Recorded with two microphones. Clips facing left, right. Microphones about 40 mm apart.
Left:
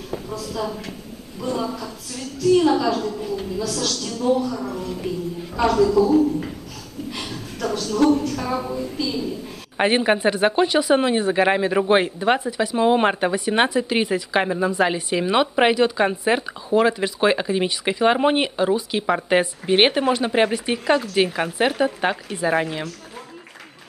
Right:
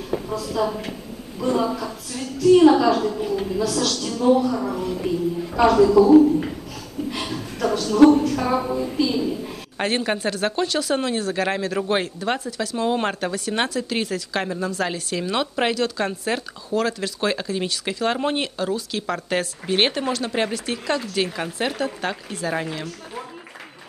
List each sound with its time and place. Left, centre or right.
0.1 s a woman's voice: centre
7.1 s a sound: centre
8.5 s a woman's voice: right
9.8 s speech: centre